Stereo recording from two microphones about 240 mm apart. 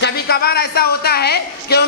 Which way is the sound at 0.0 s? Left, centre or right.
Left.